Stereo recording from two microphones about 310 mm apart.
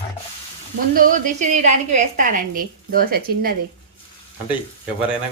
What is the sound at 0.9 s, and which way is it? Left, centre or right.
A woman's voice, right.